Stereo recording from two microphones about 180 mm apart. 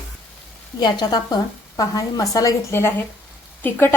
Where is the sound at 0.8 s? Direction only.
25° left (ahead or behind).